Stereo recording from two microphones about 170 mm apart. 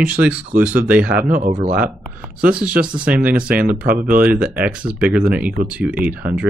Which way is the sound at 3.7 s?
55° right (ahead or behind).